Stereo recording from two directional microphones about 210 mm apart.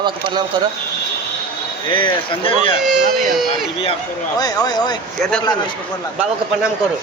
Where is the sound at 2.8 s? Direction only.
Centre (ahead or behind).